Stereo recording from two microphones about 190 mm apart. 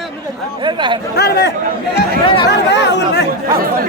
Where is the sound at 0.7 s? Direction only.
25° right (ahead or behind).